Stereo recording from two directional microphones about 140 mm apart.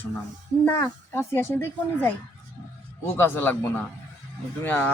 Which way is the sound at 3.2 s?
15° left (ahead or behind).